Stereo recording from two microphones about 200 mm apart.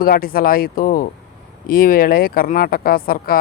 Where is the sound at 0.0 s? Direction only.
45° left (ahead or behind).